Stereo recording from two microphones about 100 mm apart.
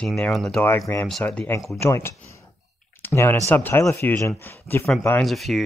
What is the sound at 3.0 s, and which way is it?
Speech, 25° left (ahead or behind).